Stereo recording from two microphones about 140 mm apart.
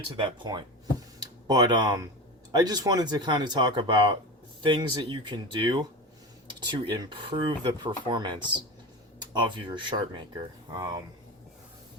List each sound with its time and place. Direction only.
0.2 s speech: 35° right (ahead or behind)